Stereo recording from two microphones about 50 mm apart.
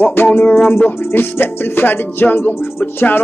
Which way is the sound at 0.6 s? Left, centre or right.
Left.